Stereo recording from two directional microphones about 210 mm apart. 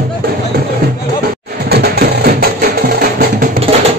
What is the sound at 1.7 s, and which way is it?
Music, 50° right (ahead or behind).